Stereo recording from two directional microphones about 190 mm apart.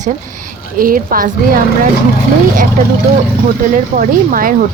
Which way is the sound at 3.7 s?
45° right (ahead or behind).